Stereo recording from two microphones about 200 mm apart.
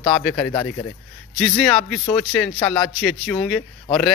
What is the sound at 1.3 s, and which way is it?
A man's voice, centre (ahead or behind).